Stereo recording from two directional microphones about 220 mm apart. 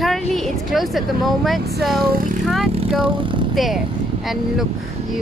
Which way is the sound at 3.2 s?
20° right (ahead or behind).